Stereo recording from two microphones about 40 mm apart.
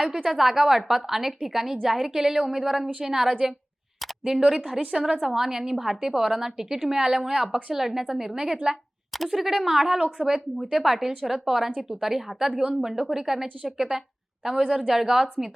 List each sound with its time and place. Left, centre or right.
0.3 s a woman's voice: centre
4.4 s a woman's voice: centre
5.2 s a woman's voice: centre